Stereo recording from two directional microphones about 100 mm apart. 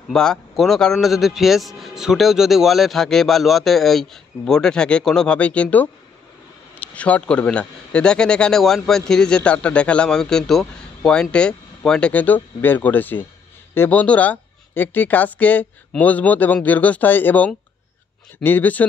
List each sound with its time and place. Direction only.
0.1 s a man's voice: 5° left (ahead or behind)